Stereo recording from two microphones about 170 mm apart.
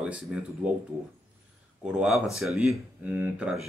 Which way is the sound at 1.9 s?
5° right (ahead or behind).